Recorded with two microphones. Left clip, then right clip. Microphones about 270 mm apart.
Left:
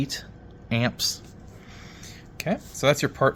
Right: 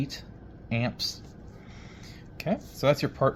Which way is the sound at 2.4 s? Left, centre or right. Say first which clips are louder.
Left 3 dB; centre.